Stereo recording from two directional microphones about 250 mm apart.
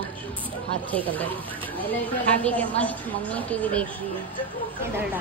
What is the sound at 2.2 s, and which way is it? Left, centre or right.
A woman's voice, centre.